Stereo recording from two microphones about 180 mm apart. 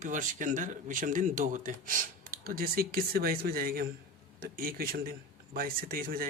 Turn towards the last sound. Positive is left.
turn(degrees=-55)  # may be behind; listen again after turning